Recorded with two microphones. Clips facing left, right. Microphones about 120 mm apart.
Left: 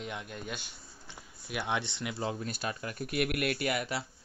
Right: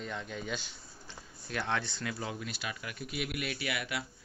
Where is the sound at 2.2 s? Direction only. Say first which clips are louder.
Left 4 dB; 40° left (ahead or behind).